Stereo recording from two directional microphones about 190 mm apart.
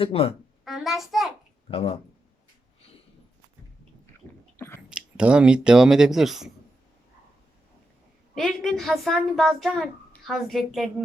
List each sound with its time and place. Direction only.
0.0 s speech: 30° left (ahead or behind)
0.6 s a child's voice: centre (ahead or behind)
1.7 s speech: 30° left (ahead or behind)
4.5 s chewing: 15° left (ahead or behind)
4.9 s speech: 5° right (ahead or behind)
8.4 s a child's voice: centre (ahead or behind)